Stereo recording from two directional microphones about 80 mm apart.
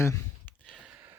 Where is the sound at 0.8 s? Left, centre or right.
Centre.